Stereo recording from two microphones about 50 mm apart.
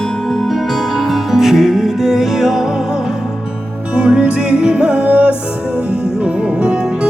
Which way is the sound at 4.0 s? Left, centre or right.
Right.